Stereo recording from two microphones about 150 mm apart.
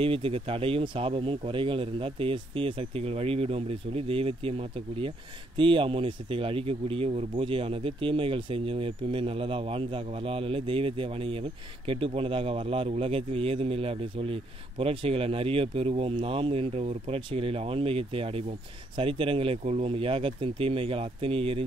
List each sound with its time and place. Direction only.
0.0 s speech: 35° right (ahead or behind)